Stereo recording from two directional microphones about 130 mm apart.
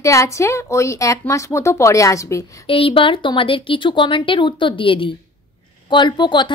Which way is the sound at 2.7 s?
45° left (ahead or behind).